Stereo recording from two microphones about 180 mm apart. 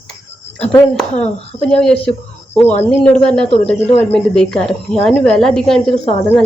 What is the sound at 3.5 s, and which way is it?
Speech, 35° left (ahead or behind).